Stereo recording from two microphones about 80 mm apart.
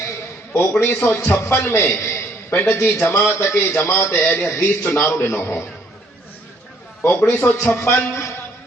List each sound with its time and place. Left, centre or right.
0.5 s a man's voice: left
1.8 s a sound: left
2.8 s a man's voice: left
7.0 s a man's voice: left